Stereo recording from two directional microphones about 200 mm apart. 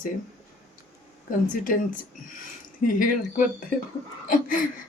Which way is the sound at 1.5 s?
45° left (ahead or behind).